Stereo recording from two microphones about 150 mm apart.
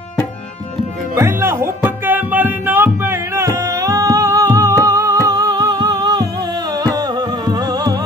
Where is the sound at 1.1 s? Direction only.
15° right (ahead or behind).